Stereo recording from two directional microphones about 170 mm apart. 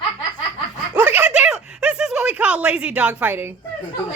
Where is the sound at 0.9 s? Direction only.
10° right (ahead or behind).